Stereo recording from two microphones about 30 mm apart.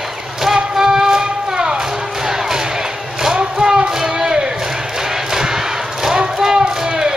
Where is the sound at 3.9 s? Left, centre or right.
Centre.